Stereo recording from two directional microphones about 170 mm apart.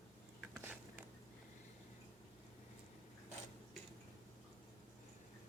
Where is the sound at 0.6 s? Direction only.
10° right (ahead or behind).